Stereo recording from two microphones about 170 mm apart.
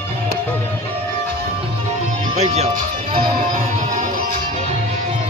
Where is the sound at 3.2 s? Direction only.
50° right (ahead or behind).